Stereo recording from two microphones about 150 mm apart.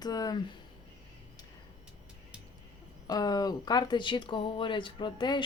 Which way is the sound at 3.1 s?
25° left (ahead or behind).